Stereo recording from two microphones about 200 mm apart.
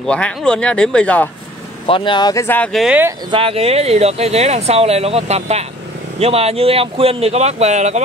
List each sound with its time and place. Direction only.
0.0 s speech: 5° left (ahead or behind)
1.9 s speech: 25° left (ahead or behind); by 3.0 s centre (ahead or behind)
3.3 s speech: 25° right (ahead or behind)